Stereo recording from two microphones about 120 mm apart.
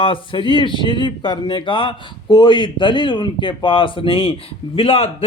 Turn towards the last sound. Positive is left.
turn(degrees=50)  # may be behind; listen again after turning